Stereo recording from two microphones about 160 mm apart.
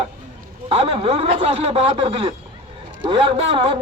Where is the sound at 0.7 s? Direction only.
40° right (ahead or behind).